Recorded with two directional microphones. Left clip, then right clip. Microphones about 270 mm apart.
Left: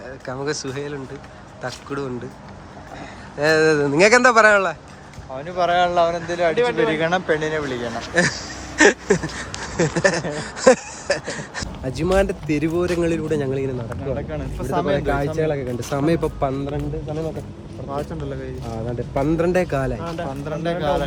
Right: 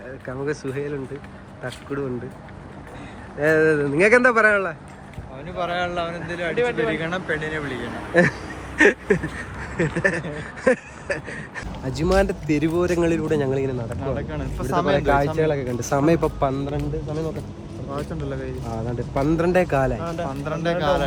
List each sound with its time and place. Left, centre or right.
0.3 s speech: centre
3.4 s speech: centre
5.5 s speech: left
8.1 s speech: centre